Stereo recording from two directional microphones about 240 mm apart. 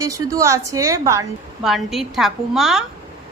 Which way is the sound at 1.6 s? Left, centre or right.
Centre.